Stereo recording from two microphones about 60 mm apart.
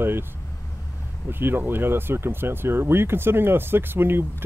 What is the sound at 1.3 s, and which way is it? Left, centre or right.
Speech, right.